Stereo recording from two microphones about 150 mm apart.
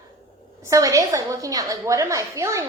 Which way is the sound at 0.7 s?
25° right (ahead or behind).